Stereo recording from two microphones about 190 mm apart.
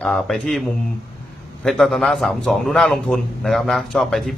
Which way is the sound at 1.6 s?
Centre (ahead or behind).